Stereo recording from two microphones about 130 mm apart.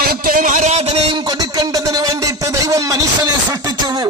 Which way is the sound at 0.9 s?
35° right (ahead or behind).